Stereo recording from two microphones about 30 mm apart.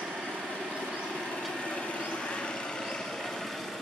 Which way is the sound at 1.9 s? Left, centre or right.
Left.